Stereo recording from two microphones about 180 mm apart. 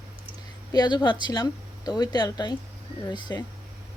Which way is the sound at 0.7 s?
20° left (ahead or behind).